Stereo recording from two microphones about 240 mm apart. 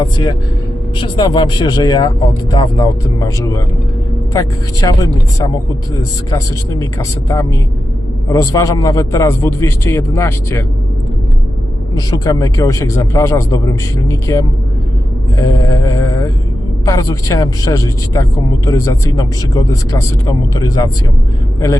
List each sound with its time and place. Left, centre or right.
0.0 s speech: centre
6.3 s speech: centre
11.9 s speech: centre